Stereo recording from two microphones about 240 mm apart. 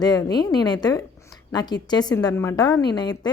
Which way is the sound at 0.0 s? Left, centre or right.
Centre.